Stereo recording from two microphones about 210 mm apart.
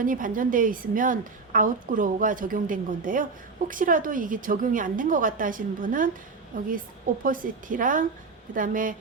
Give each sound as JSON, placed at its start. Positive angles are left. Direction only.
{"t": 0.0, "sound": "a woman's voice", "side_deg": -40}